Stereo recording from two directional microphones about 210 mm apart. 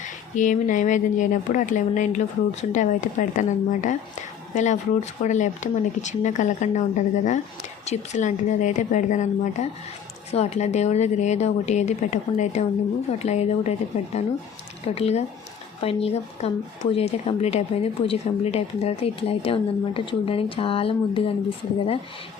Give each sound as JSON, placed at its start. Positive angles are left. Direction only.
{"t": 0.0, "sound": "speech", "side_deg": 35}